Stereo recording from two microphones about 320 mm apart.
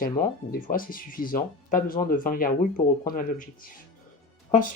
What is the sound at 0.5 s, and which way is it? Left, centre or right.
Speech, left.